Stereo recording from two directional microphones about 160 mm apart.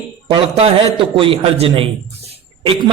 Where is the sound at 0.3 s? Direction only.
35° right (ahead or behind).